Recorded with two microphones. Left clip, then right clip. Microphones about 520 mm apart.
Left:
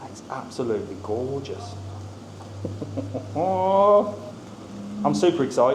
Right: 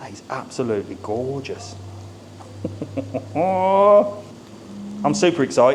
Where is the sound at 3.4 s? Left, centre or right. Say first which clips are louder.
Right 3 dB; right.